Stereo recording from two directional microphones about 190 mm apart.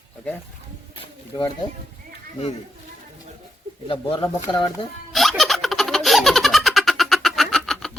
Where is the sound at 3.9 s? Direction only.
25° left (ahead or behind).